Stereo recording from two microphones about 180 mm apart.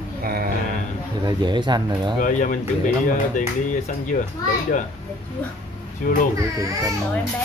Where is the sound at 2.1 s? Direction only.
45° left (ahead or behind).